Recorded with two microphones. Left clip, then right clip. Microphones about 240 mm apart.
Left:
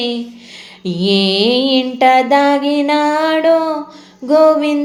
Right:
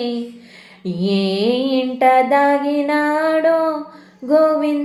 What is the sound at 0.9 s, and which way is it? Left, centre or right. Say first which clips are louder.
Music: left 6 dB; left.